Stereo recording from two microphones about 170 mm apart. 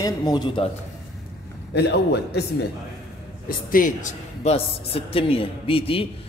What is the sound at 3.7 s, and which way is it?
Speech, 55° left (ahead or behind).